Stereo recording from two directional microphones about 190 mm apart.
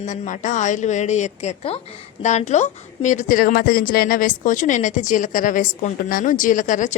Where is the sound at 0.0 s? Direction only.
40° left (ahead or behind).